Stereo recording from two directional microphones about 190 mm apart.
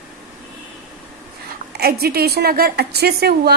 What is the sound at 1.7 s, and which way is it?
A woman's voice, 55° right (ahead or behind).